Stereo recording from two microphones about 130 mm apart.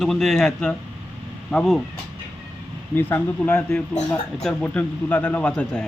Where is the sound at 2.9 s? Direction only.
15° left (ahead or behind).